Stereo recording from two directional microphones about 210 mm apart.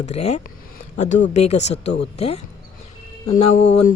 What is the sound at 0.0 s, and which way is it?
Speech, 30° left (ahead or behind).